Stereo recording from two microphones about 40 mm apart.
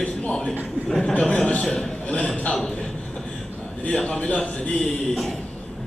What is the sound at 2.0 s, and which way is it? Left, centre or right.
Speech, left.